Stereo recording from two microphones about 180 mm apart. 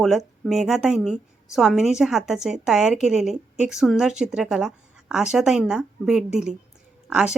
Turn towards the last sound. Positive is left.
turn(degrees=-5)  # may be behind; listen again after turning